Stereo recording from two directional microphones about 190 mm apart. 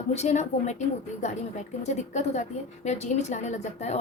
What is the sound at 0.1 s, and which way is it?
Speech, 35° left (ahead or behind).